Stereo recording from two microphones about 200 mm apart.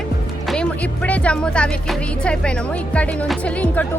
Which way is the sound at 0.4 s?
5° left (ahead or behind).